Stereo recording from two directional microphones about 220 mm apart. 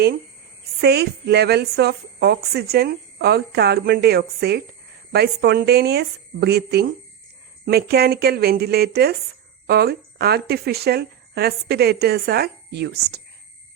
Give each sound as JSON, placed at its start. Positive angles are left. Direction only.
{"t": 0.8, "sound": "a woman's voice", "side_deg": -50}